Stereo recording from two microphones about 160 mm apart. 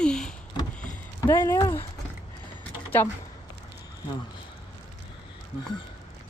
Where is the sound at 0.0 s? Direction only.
5° left (ahead or behind).